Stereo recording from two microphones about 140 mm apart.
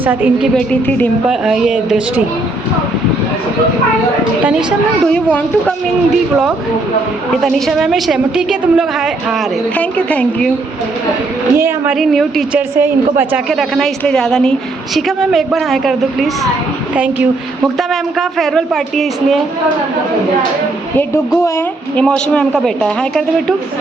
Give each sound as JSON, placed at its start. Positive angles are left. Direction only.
{"t": 0.0, "sound": "a woman's voice", "side_deg": -15}
{"t": 0.5, "sound": "a woman's voice", "side_deg": 10}
{"t": 1.3, "sound": "a woman's voice", "side_deg": -5}
{"t": 5.1, "sound": "a woman's voice", "side_deg": 10}
{"t": 7.4, "sound": "a woman's voice", "side_deg": 0}
{"t": 9.7, "sound": "a woman's voice", "side_deg": 10}
{"t": 11.5, "sound": "a woman's voice", "side_deg": -15}
{"t": 11.9, "sound": "a woman's voice", "side_deg": 0}
{"t": 12.5, "sound": "a woman's voice", "side_deg": -15}
{"t": 13.5, "sound": "a woman's voice", "side_deg": 0}
{"t": 17.7, "sound": "a woman's voice", "side_deg": 0}
{"t": 21.4, "sound": "a woman's voice", "side_deg": 20}
{"t": 22.0, "sound": "a woman's voice", "side_deg": 5}